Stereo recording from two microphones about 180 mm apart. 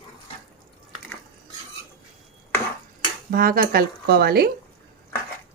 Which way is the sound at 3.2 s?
55° right (ahead or behind).